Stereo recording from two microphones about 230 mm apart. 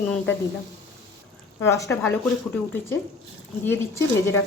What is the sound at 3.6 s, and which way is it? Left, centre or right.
Speech, centre.